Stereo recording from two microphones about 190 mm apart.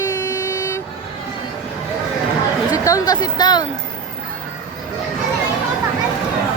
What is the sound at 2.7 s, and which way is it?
Speech, 15° left (ahead or behind).